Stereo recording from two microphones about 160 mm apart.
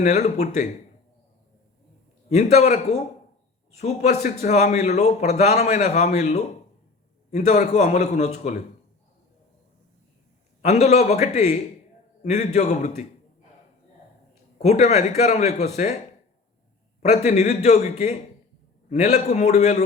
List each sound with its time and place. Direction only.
0.0 s a man's voice: 45° left (ahead or behind)
2.3 s a man's voice: 45° left (ahead or behind)
10.6 s a man's voice: 45° left (ahead or behind)
14.6 s a man's voice: 45° left (ahead or behind)
17.0 s a man's voice: 45° left (ahead or behind)